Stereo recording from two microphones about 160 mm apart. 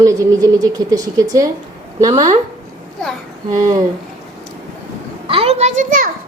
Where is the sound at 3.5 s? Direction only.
25° right (ahead or behind).